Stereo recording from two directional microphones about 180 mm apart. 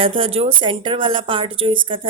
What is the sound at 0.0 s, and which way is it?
A woman's voice, 30° right (ahead or behind).